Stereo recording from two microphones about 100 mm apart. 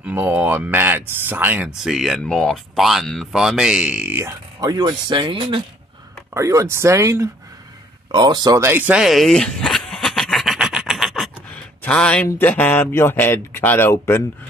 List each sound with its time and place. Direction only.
0.0 s speech: 20° right (ahead or behind)
1.8 s speech: centre (ahead or behind)
4.1 s speech: 25° right (ahead or behind)
4.6 s speech: 45° right (ahead or behind)
6.3 s speech: 30° right (ahead or behind)
8.1 s speech: 45° right (ahead or behind)
8.5 s speech: 20° right (ahead or behind)
8.9 s a sound: centre (ahead or behind)
11.5 s a sound: 10° left (ahead or behind)
12.3 s speech: 20° left (ahead or behind)